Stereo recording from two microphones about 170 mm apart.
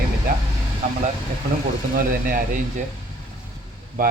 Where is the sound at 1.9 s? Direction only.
55° right (ahead or behind).